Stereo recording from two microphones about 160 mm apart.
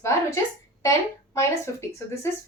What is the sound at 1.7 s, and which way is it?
Speech, 20° left (ahead or behind).